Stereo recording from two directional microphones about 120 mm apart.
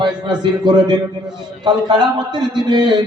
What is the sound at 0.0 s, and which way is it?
Speech, 40° right (ahead or behind).